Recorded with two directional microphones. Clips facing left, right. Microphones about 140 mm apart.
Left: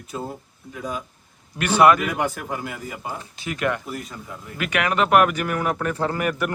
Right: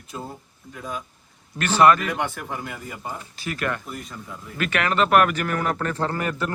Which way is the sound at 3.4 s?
20° left (ahead or behind).